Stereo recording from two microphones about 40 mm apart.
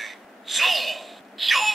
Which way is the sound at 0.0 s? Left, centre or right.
Centre.